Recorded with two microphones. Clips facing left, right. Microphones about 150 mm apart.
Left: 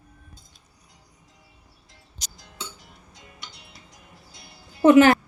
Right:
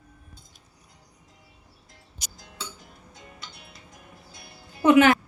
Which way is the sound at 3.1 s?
55° right (ahead or behind).